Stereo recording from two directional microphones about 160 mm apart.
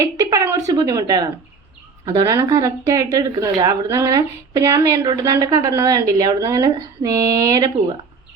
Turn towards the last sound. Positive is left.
turn(degrees=-20)  # may be behind; listen again after turning